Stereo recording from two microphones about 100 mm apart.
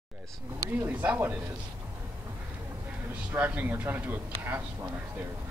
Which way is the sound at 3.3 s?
20° right (ahead or behind).